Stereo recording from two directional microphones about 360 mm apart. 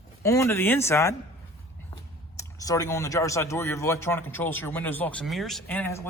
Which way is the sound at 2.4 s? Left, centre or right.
Centre.